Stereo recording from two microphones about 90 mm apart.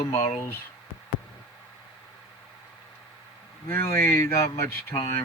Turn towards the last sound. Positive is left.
turn(degrees=30)  # may be behind; listen again after turning